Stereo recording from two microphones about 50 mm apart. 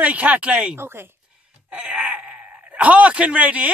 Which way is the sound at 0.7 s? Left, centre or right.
Right.